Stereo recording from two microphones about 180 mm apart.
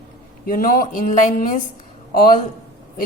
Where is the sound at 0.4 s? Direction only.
50° left (ahead or behind).